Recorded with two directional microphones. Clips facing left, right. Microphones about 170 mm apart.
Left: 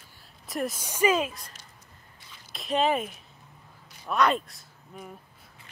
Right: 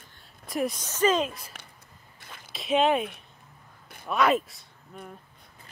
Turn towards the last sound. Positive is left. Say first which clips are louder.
# even
turn(degrees=10)  # may be behind; listen again after turning